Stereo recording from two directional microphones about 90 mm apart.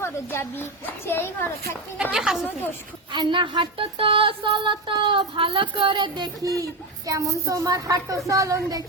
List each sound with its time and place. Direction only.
0.0 s a woman's voice: 25° left (ahead or behind)
2.0 s a woman's voice: 5° right (ahead or behind)
3.1 s speech: 60° right (ahead or behind); by 8.8 s 40° right (ahead or behind)